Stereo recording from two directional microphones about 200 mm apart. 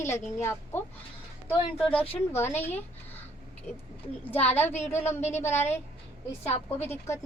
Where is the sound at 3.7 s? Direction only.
35° left (ahead or behind).